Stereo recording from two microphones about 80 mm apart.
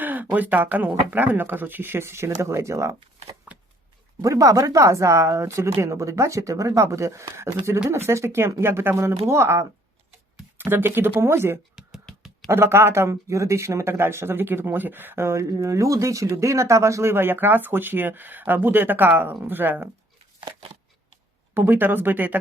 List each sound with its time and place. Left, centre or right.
0.0 s speech: right
4.2 s speech: right
12.1 s a sound: centre
12.5 s speech: right
21.5 s speech: right